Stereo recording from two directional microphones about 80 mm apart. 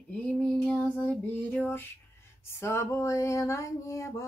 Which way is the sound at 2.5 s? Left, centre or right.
Left.